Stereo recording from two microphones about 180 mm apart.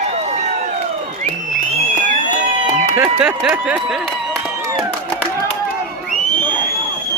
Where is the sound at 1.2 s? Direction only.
45° right (ahead or behind).